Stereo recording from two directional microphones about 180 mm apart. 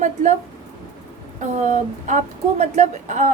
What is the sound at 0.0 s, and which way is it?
Speech, 40° right (ahead or behind).